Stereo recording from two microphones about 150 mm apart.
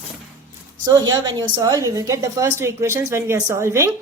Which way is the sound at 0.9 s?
25° right (ahead or behind).